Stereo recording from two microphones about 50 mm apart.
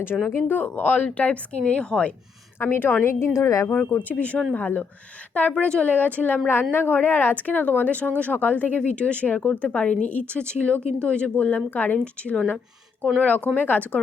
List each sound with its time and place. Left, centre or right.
0.3 s speech: left; by 2.1 s centre
2.6 s a woman's voice: left
3.1 s a woman's voice: left
4.1 s a woman's voice: left
5.6 s speech: left
5.9 s a woman's voice: left
6.5 s a woman's voice: left
11.9 s a woman's voice: left